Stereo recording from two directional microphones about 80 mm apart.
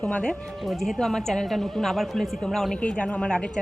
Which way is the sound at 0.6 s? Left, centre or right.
Centre.